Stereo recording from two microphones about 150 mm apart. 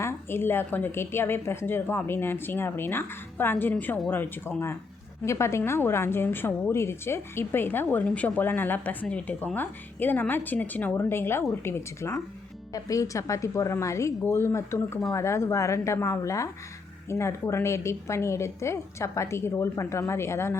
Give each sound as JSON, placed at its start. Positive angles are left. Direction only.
{"t": 0.0, "sound": "a woman's voice", "side_deg": 15}